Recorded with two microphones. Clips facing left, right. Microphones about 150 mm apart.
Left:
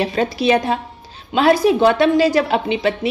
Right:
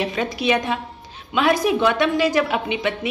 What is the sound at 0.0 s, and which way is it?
A woman's voice, 35° left (ahead or behind).